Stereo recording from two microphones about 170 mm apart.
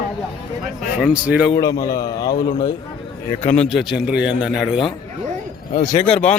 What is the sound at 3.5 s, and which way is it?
Speech, centre (ahead or behind).